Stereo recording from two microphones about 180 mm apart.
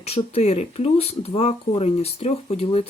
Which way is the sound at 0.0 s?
35° left (ahead or behind).